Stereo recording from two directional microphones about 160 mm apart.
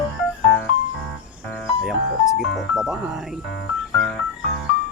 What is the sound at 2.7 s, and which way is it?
Speech, 5° right (ahead or behind).